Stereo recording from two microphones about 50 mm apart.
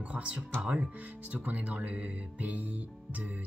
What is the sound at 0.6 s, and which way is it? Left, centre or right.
Speech, right.